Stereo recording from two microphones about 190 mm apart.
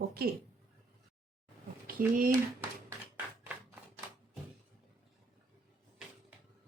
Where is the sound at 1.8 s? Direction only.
50° right (ahead or behind).